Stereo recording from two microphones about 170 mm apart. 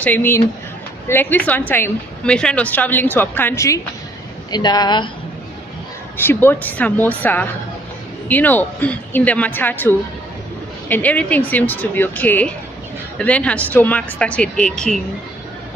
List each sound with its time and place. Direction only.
0.0 s a woman's voice: 10° left (ahead or behind)
6.1 s a woman's voice: 10° left (ahead or behind)